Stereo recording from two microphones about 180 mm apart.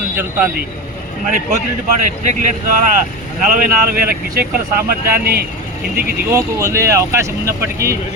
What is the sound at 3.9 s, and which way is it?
Speech, 55° right (ahead or behind).